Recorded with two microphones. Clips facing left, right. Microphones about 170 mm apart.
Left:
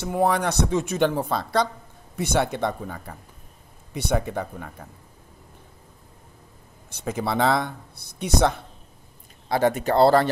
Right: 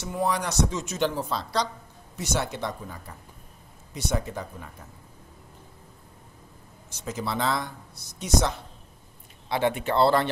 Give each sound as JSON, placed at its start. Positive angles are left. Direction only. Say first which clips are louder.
{"t": 0.0, "sound": "speech", "louder": "left 5 dB", "side_deg": 60}
{"t": 6.9, "sound": "speech", "louder": "left 5 dB", "side_deg": 60}
{"t": 9.5, "sound": "speech", "louder": "left 4 dB", "side_deg": 40}